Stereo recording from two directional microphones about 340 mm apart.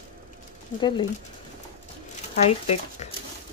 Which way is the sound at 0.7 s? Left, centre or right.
Centre.